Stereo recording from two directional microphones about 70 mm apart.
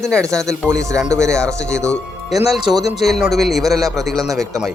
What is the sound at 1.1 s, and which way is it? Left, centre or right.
Speech, right.